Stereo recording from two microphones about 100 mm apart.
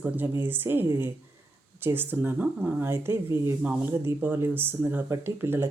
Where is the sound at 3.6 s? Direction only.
15° right (ahead or behind).